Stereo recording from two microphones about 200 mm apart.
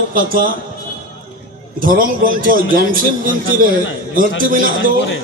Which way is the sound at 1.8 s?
45° right (ahead or behind).